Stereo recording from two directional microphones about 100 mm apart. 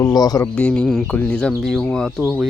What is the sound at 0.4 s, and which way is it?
Speech, 10° left (ahead or behind).